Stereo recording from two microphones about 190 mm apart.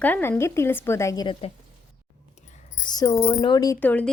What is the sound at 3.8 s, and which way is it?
Speech, 10° left (ahead or behind).